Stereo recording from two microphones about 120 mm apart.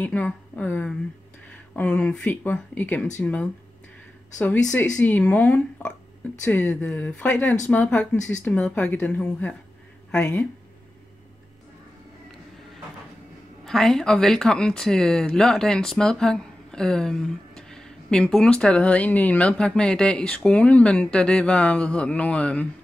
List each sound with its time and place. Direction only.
0.0 s speech: 10° left (ahead or behind)
13.7 s speech: 5° left (ahead or behind)